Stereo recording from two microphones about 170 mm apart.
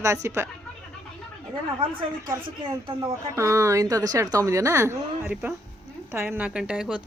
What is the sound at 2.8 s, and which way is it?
Speech, 20° right (ahead or behind).